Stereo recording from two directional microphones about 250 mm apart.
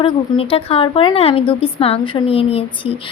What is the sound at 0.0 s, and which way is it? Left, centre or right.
A woman's voice, left.